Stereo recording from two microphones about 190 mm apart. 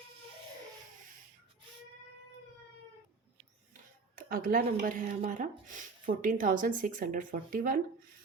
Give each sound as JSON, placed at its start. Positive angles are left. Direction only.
{"t": 4.1, "sound": "speech", "side_deg": -50}